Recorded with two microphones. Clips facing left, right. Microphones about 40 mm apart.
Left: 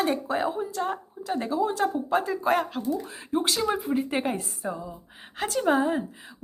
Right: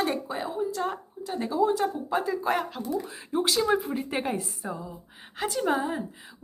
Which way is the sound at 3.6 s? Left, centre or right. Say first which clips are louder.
Even; centre.